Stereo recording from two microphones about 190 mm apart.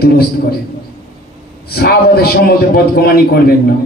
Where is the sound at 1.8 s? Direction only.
55° left (ahead or behind).